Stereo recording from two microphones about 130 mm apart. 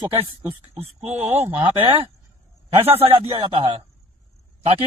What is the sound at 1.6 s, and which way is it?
A man's voice, 45° right (ahead or behind).